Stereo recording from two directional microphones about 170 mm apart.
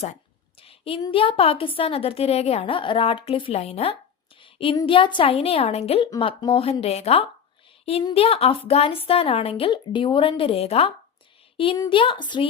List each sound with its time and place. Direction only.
0.6 s child singing: 35° left (ahead or behind)
1.0 s a woman's voice: 30° left (ahead or behind)
4.4 s a sound: 30° left (ahead or behind)
4.8 s a woman's voice: 30° left (ahead or behind)